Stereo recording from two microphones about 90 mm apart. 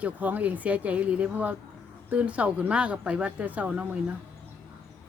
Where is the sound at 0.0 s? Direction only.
20° right (ahead or behind).